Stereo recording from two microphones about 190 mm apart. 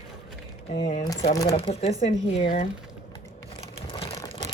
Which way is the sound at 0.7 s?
35° left (ahead or behind).